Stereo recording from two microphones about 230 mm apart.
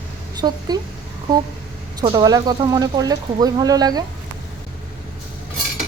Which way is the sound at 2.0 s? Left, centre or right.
Centre.